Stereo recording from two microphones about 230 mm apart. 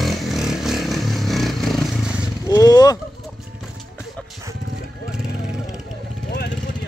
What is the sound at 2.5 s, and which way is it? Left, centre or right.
Vehicle, centre.